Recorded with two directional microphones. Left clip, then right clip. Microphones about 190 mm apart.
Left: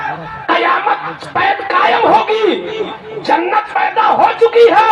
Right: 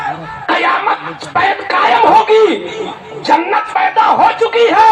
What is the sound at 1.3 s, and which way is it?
A man's voice, 20° right (ahead or behind).